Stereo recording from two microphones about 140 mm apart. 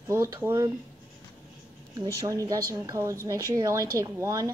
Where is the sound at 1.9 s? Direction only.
25° right (ahead or behind).